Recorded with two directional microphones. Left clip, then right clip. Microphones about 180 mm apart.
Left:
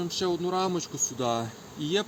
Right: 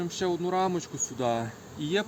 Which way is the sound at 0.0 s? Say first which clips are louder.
Left 1 dB; 15° right (ahead or behind).